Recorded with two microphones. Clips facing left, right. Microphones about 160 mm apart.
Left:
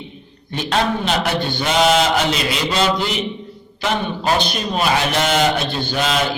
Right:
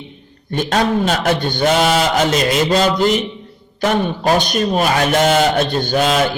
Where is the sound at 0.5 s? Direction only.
45° right (ahead or behind).